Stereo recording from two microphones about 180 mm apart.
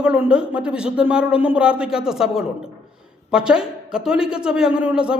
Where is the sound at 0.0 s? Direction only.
5° right (ahead or behind).